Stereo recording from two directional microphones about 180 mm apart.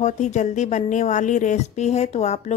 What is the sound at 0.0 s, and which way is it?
Speech, 40° left (ahead or behind).